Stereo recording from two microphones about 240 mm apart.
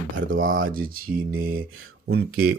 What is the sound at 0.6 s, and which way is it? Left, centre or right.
Speech, right.